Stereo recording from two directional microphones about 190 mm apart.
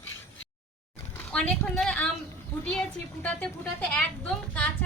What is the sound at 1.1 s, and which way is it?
Speech, 5° left (ahead or behind).